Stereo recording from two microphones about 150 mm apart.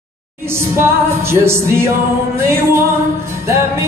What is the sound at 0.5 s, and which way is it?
Music, 15° right (ahead or behind).